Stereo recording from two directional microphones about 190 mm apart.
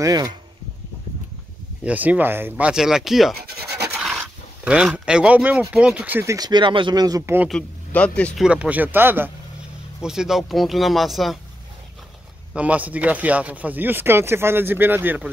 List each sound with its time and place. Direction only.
0.0 s speech: 20° right (ahead or behind)
1.9 s speech: 10° right (ahead or behind)
3.3 s scratch: 60° right (ahead or behind)
3.8 s speech: 5° right (ahead or behind)
7.4 s speech: 5° left (ahead or behind)
8.5 s speech: 5° right (ahead or behind)
12.5 s speech: 5° right (ahead or behind)